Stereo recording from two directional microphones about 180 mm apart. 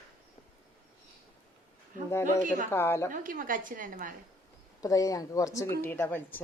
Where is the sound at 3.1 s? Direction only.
50° right (ahead or behind).